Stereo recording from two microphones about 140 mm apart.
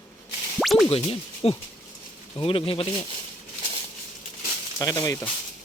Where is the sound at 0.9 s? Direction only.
45° left (ahead or behind).